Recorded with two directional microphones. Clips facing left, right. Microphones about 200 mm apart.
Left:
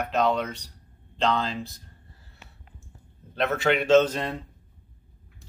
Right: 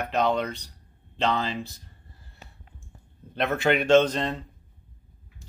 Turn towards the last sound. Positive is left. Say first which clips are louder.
# even
turn(degrees=10)  # may be behind; listen again after turning